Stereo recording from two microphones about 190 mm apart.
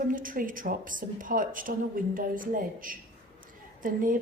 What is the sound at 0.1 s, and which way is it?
A woman's voice, 45° right (ahead or behind).